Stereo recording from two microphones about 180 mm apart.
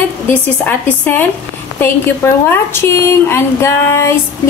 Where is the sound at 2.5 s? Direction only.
15° left (ahead or behind).